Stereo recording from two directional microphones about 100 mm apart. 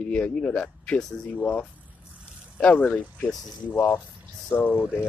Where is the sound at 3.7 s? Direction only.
20° left (ahead or behind).